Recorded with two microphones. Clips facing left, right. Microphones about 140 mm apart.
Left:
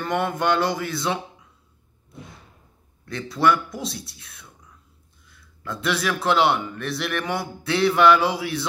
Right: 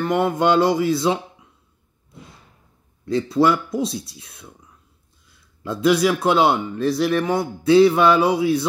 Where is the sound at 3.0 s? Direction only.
25° right (ahead or behind).